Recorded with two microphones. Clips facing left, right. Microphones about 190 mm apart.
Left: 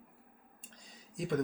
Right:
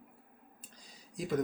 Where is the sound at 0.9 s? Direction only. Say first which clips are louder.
Even; centre (ahead or behind).